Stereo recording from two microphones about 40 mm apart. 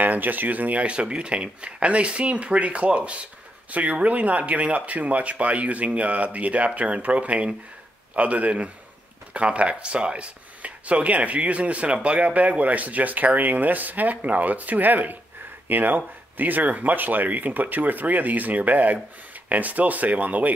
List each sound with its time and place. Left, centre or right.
0.0 s speech: right